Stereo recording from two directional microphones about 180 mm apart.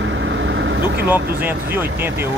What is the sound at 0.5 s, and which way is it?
Vehicle, 85° right.